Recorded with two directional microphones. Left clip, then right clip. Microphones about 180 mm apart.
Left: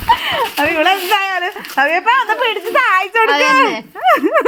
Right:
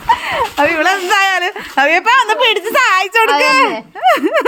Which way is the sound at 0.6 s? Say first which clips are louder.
Right 1 dB; 15° right (ahead or behind).